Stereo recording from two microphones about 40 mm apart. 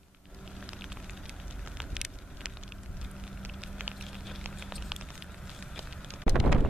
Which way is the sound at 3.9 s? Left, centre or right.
Centre.